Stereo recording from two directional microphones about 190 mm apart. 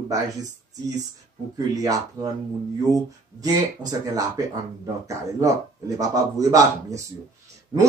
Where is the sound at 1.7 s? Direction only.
20° right (ahead or behind).